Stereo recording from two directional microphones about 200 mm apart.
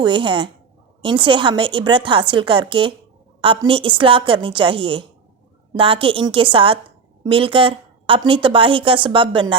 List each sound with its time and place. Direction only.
0.0 s a woman's voice: 25° right (ahead or behind)